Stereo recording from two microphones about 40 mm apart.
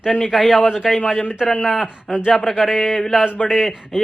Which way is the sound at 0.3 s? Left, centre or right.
Centre.